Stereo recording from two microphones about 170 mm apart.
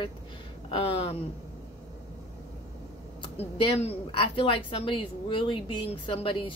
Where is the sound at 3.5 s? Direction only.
30° left (ahead or behind).